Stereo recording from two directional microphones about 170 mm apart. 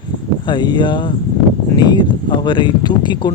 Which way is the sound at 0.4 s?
25° left (ahead or behind).